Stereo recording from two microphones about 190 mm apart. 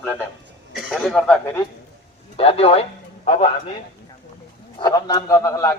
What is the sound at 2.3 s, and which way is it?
A man's voice, 30° left (ahead or behind).